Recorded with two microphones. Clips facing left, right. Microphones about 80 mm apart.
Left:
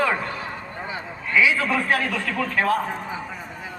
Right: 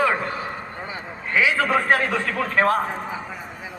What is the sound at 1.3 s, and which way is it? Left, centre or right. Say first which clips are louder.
Speech: even; right.